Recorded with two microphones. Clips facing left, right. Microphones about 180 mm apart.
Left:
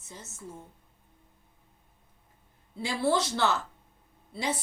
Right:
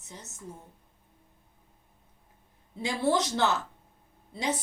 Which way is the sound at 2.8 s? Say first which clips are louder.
Even; 20° right (ahead or behind).